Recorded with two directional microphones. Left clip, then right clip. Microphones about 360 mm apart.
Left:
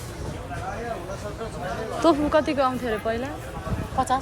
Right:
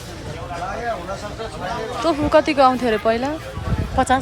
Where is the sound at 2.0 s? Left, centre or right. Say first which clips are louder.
Right 4 dB; centre.